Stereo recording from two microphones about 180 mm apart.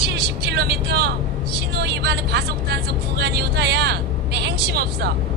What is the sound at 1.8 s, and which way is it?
Speech, 65° right (ahead or behind).